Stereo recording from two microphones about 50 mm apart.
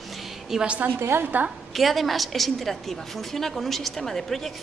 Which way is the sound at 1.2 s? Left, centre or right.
Right.